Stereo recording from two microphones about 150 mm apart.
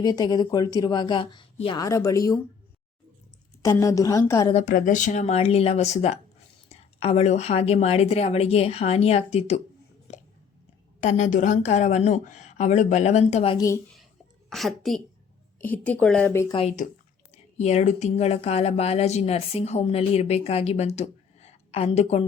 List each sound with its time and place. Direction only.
0.0 s speech: 25° left (ahead or behind)
1.8 s speech: 20° left (ahead or behind)
3.6 s speech: 20° left (ahead or behind)
4.5 s speech: 60° left (ahead or behind)
10.1 s a sound: 50° left (ahead or behind)
11.0 s speech: 55° left (ahead or behind)
14.5 s a woman's voice: centre (ahead or behind)
16.5 s speech: 45° left (ahead or behind)